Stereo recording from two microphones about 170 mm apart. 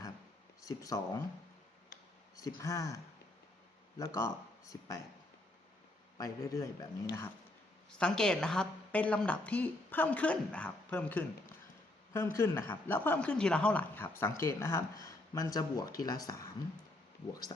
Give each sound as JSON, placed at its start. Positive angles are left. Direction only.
{"t": 0.6, "sound": "speech", "side_deg": 20}
{"t": 2.3, "sound": "speech", "side_deg": 20}
{"t": 6.1, "sound": "speech", "side_deg": 20}
{"t": 7.9, "sound": "a woman's voice", "side_deg": 5}